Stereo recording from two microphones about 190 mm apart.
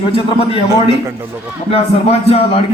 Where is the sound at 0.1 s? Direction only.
30° left (ahead or behind).